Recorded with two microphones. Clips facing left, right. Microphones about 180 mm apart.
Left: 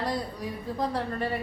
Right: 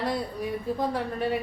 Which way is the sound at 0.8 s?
5° right (ahead or behind).